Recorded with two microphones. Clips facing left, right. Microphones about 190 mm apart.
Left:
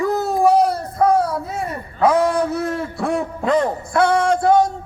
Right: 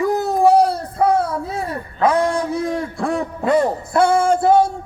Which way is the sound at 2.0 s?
5° left (ahead or behind).